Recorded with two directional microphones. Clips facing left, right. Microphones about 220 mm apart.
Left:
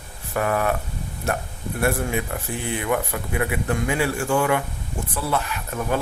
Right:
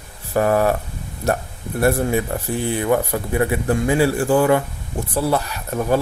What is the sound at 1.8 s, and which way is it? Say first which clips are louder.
A man's voice: right 5 dB; 35° right (ahead or behind).